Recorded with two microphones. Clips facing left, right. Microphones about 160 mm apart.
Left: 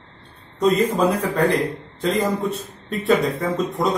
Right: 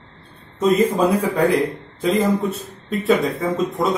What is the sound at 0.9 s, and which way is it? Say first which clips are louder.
A man's voice: right 2 dB; 10° right (ahead or behind).